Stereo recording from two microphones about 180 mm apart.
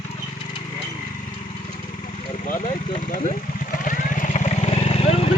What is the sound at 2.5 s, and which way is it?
Vehicle, 35° left (ahead or behind).